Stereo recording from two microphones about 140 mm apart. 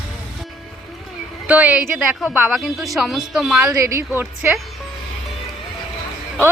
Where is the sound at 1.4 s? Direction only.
10° right (ahead or behind).